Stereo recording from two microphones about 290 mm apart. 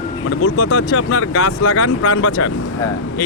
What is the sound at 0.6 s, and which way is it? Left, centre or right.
Speech, left.